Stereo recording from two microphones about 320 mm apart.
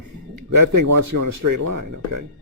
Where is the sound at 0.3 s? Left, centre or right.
Right.